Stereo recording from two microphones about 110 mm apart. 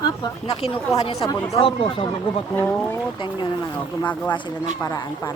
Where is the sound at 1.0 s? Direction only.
40° left (ahead or behind).